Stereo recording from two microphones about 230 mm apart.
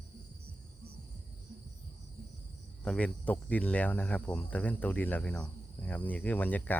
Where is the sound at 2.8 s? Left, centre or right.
Centre.